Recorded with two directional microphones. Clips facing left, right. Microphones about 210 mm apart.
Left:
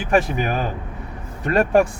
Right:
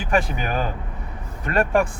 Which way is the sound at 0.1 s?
40° left (ahead or behind).